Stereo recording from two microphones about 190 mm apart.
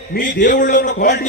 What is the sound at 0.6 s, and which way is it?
Speech, 40° left (ahead or behind).